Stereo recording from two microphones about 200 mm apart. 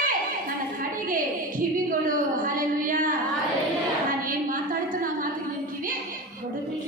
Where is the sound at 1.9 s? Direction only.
45° right (ahead or behind).